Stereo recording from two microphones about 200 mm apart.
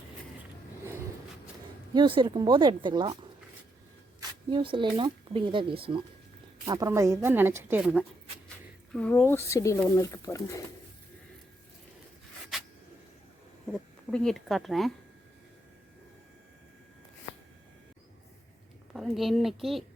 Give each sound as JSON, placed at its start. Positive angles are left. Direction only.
{"t": 1.9, "sound": "speech", "side_deg": -25}
{"t": 4.2, "sound": "a woman's voice", "side_deg": -25}
{"t": 8.9, "sound": "speech", "side_deg": 5}
{"t": 13.7, "sound": "speech", "side_deg": 0}
{"t": 18.9, "sound": "a woman's voice", "side_deg": 0}